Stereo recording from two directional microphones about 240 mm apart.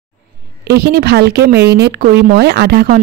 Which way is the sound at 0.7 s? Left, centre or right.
Right.